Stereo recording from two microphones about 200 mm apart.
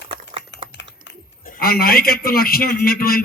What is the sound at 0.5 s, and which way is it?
Typing, 65° left (ahead or behind).